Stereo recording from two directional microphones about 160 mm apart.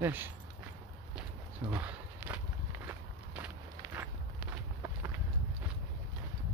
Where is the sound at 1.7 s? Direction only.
10° right (ahead or behind).